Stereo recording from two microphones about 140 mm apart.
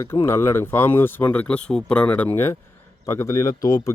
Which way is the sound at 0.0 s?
20° left (ahead or behind).